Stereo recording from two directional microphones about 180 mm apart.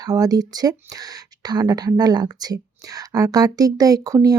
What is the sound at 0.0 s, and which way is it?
Speech, 20° right (ahead or behind).